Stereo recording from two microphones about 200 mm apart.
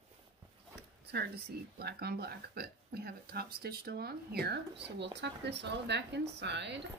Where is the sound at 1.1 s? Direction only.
50° right (ahead or behind).